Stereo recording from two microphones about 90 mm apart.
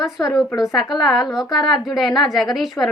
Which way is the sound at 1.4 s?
50° left (ahead or behind).